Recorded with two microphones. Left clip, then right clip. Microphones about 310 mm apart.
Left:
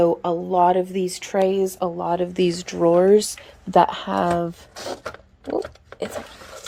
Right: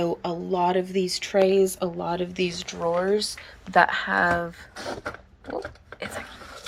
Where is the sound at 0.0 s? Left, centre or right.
Centre.